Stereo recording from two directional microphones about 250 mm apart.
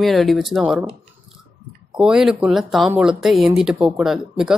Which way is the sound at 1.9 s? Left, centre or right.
Centre.